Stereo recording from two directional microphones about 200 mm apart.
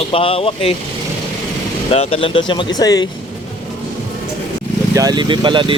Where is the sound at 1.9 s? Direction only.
30° left (ahead or behind).